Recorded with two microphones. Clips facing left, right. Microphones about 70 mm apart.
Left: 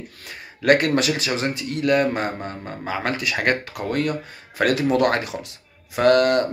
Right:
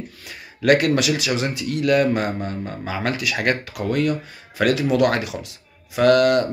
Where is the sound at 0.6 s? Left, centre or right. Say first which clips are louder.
Right 1 dB; left.